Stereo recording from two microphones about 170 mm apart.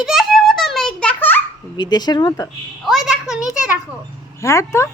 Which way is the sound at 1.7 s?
25° left (ahead or behind).